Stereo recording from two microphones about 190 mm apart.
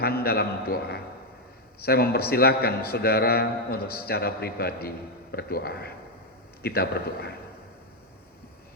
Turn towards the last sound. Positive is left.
turn(degrees=55)  # may be behind; listen again after turning